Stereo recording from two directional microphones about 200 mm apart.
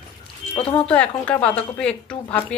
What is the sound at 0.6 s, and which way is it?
Speech, 25° left (ahead or behind).